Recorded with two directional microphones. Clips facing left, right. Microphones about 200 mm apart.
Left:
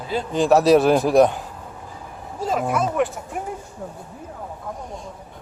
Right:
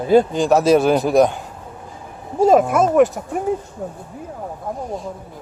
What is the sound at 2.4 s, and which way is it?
Speech, 45° right (ahead or behind).